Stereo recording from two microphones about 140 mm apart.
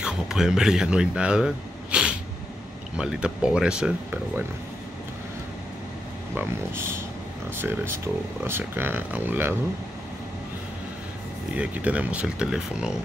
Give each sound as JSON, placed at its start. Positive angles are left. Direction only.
{"t": 0.0, "sound": "speech", "side_deg": -5}
{"t": 6.3, "sound": "speech", "side_deg": -20}
{"t": 11.5, "sound": "speech", "side_deg": -10}